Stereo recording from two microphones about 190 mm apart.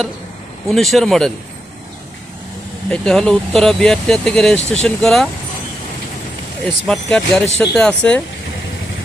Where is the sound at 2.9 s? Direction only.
5° left (ahead or behind).